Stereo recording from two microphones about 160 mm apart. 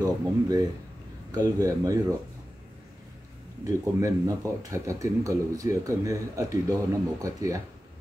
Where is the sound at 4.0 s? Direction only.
20° right (ahead or behind).